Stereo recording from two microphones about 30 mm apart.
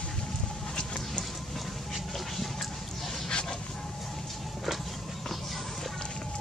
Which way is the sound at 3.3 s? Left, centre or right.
Left.